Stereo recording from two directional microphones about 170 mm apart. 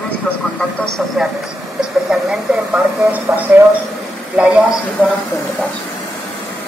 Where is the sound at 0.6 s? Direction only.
Centre (ahead or behind).